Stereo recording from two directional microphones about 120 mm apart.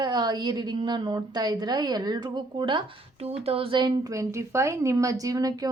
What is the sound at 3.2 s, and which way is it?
A woman's voice, 55° right (ahead or behind).